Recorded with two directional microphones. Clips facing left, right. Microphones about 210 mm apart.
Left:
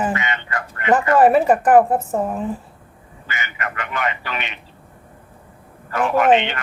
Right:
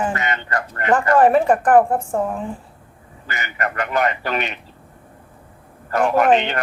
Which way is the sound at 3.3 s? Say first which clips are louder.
Right 3 dB; 40° right (ahead or behind).